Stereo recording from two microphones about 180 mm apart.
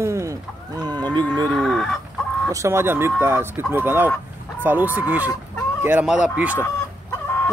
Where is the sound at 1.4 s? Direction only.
Centre (ahead or behind).